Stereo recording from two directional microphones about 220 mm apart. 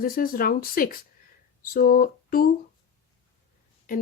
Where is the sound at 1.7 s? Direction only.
40° left (ahead or behind).